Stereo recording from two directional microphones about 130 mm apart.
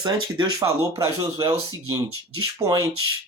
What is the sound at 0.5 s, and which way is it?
Speech, 20° right (ahead or behind).